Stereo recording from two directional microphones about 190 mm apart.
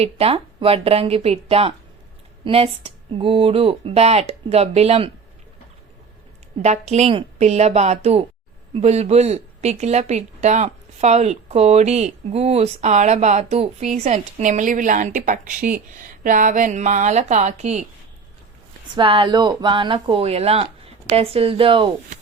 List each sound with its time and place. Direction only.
0.0 s speech: 30° right (ahead or behind)
6.6 s speech: 35° right (ahead or behind)
18.9 s speech: 25° right (ahead or behind)